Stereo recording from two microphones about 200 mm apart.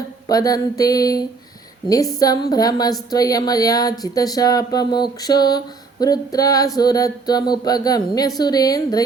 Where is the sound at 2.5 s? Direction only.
20° left (ahead or behind).